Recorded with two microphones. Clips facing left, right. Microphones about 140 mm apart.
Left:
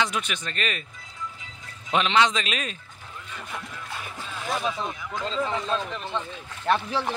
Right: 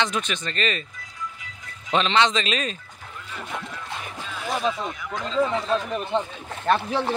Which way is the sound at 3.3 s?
20° right (ahead or behind).